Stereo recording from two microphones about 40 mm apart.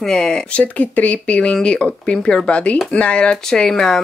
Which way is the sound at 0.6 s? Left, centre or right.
Left.